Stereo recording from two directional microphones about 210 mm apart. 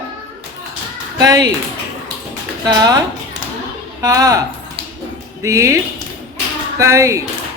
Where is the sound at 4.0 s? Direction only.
15° right (ahead or behind).